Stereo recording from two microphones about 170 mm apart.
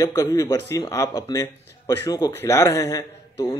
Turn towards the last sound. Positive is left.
turn(degrees=15)  # may be behind; listen again after turning